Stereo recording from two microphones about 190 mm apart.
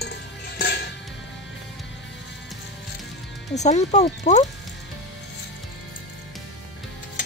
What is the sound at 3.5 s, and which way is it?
Speech, 35° left (ahead or behind).